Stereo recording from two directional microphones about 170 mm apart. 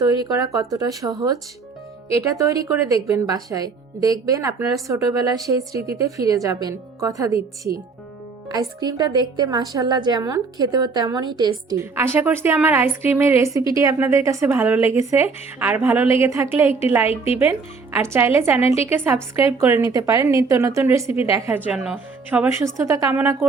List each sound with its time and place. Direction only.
0.0 s speech: 25° right (ahead or behind)
17.1 s speech: 35° left (ahead or behind)
18.0 s speech: 15° right (ahead or behind)
18.5 s speech: 35° left (ahead or behind)
18.9 s speech: 15° right (ahead or behind)